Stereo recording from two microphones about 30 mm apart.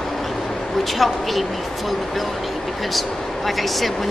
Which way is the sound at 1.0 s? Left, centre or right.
Centre.